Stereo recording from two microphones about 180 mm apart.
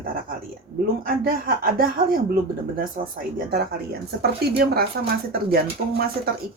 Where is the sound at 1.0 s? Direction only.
55° right (ahead or behind).